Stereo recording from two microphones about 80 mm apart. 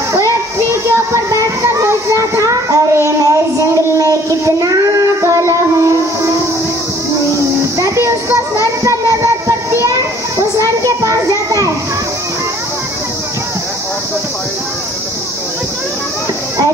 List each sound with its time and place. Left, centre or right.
0.7 s child singing: right
7.8 s music: right
8.8 s child singing: right
10.6 s a sound: right